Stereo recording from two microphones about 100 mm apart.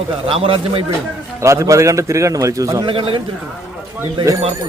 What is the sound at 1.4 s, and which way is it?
Speech, 30° right (ahead or behind).